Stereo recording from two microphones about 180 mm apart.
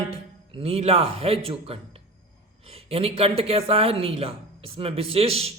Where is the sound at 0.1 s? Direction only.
35° right (ahead or behind).